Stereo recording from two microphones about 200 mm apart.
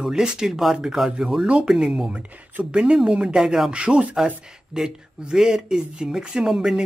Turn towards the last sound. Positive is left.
turn(degrees=0)  # may be behind; listen again after turning